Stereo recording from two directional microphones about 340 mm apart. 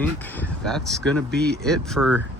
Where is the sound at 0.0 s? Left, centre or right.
Centre.